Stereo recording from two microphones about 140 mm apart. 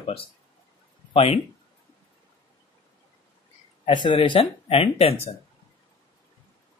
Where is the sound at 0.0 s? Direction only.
40° left (ahead or behind).